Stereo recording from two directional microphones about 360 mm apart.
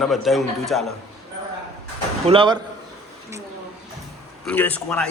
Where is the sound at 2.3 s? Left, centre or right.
Centre.